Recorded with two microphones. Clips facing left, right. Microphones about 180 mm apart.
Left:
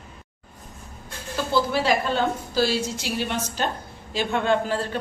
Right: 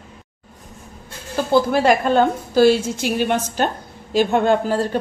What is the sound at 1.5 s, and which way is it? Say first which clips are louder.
Speech: right 6 dB; 50° right (ahead or behind).